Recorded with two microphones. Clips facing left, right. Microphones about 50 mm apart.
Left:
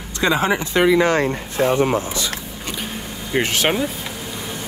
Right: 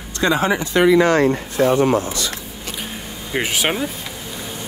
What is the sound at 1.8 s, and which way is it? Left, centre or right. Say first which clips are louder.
Speech: right 2 dB; left.